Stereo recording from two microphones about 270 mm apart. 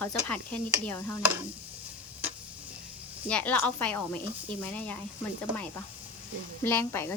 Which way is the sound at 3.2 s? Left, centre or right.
Centre.